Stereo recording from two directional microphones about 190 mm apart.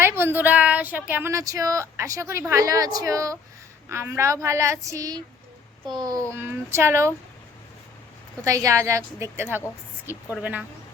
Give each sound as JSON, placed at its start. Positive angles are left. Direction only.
{"t": 0.0, "sound": "a child's voice", "side_deg": -10}
{"t": 8.4, "sound": "speech", "side_deg": -15}